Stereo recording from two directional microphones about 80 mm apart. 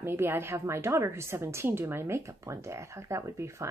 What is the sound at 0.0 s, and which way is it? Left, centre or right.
Speech, right.